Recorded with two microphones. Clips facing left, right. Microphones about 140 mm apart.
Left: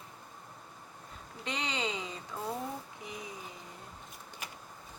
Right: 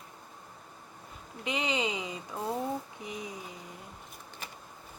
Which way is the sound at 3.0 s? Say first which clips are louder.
Right 4 dB; 20° right (ahead or behind).